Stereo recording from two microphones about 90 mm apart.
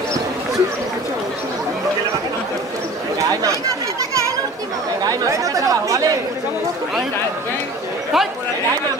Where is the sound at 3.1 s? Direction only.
40° right (ahead or behind).